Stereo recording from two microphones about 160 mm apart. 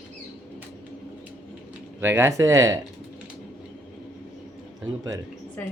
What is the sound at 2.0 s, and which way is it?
Speech, 15° right (ahead or behind).